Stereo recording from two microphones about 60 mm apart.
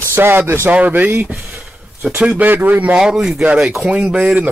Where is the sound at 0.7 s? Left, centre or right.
Right.